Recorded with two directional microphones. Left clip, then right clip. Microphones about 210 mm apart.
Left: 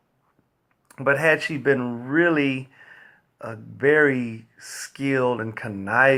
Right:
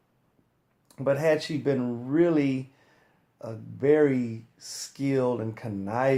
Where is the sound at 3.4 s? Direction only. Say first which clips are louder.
Left 5 dB; 20° left (ahead or behind).